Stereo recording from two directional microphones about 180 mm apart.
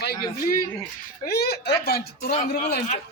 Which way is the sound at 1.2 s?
60° left (ahead or behind).